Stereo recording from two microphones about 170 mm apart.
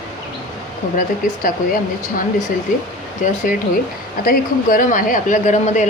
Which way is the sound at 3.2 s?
50° left (ahead or behind).